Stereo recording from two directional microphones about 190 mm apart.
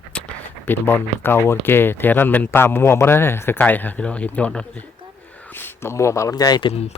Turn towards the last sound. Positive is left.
turn(degrees=30)  # may be behind; listen again after turning